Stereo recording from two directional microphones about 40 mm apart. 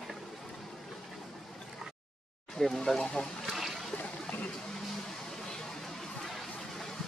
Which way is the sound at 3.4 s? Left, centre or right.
Centre.